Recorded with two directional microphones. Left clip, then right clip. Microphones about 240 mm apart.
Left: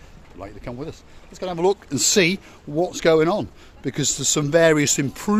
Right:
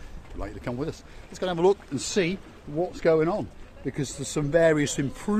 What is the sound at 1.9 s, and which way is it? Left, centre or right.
Speech, left.